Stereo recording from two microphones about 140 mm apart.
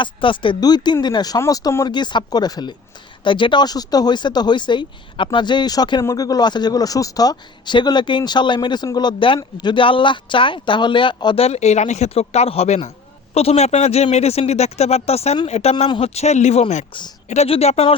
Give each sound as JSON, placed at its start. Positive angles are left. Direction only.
{"t": 0.0, "sound": "speech", "side_deg": 35}
{"t": 11.4, "sound": "speech", "side_deg": 50}